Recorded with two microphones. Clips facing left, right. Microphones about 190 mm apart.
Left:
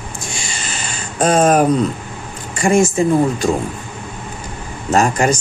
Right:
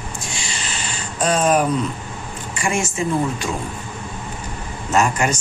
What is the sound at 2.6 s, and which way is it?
Speech, 35° left (ahead or behind).